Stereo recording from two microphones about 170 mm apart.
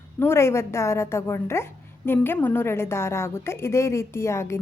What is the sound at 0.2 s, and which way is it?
A woman's voice, 15° left (ahead or behind).